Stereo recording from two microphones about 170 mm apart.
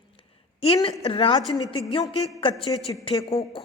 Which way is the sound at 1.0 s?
35° left (ahead or behind).